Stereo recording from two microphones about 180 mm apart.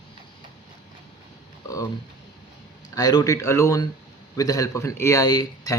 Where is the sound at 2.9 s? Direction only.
20° left (ahead or behind).